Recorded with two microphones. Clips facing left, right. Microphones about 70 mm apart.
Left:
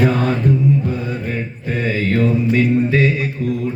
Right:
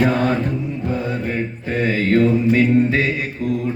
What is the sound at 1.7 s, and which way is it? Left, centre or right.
Mantra, right.